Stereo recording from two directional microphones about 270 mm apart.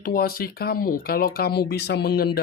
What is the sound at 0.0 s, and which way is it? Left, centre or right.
Speech, left.